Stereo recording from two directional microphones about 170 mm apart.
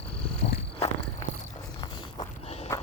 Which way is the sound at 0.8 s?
40° left (ahead or behind).